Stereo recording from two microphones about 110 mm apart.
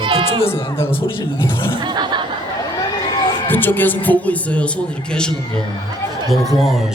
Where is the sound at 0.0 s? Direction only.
50° right (ahead or behind).